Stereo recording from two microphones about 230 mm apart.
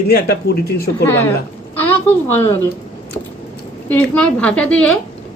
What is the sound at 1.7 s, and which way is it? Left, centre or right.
Speech, centre.